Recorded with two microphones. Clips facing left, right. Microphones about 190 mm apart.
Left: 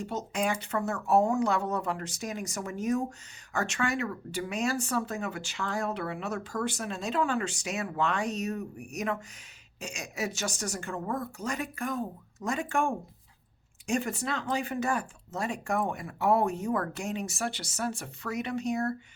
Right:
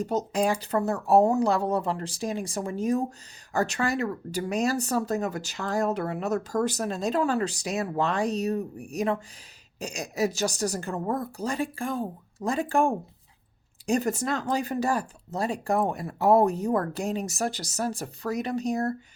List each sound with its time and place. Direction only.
0.0 s speech: 40° right (ahead or behind)